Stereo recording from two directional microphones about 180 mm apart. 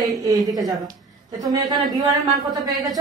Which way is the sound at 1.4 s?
20° right (ahead or behind).